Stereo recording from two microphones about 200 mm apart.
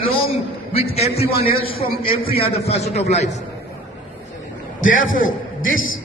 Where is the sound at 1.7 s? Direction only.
45° left (ahead or behind).